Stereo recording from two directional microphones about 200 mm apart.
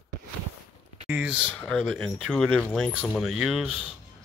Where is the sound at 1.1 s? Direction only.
5° right (ahead or behind).